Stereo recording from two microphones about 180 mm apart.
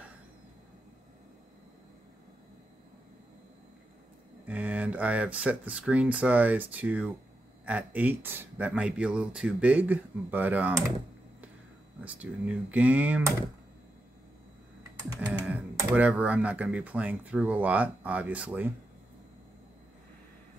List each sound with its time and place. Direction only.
4.5 s speech: 10° right (ahead or behind)
12.0 s speech: 10° right (ahead or behind)
15.1 s typing: 5° right (ahead or behind)
15.9 s speech: 5° right (ahead or behind)